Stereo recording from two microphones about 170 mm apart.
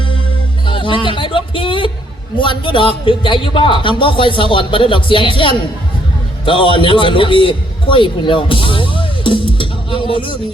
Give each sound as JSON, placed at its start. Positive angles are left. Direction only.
{"t": 0.6, "sound": "a man's voice", "side_deg": 30}